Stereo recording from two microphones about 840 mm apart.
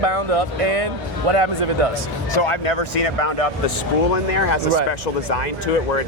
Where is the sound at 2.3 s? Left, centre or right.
Left.